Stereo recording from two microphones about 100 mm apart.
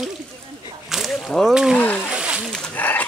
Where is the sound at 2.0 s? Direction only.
10° right (ahead or behind).